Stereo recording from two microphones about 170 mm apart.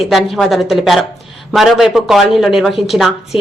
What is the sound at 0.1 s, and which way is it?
A woman's voice, centre (ahead or behind).